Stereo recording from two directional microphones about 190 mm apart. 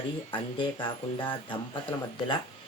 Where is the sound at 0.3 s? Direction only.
25° left (ahead or behind).